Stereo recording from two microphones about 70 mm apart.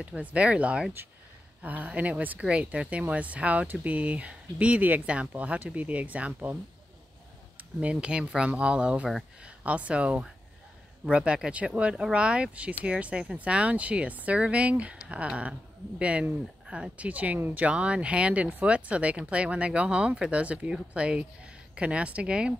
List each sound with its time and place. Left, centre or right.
0.0 s speech: centre
7.8 s speech: centre